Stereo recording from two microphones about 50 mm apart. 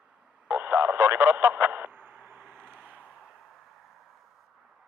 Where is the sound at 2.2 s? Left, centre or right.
Right.